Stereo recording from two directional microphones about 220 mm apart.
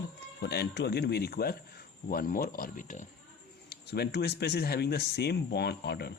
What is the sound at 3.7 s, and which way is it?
Speech, 50° left (ahead or behind).